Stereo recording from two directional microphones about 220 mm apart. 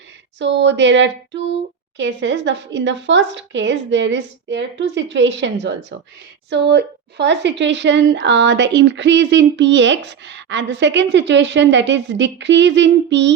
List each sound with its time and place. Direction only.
0.3 s a woman's voice: 55° right (ahead or behind)